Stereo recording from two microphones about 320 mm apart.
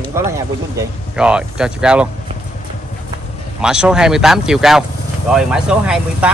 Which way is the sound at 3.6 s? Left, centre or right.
Centre.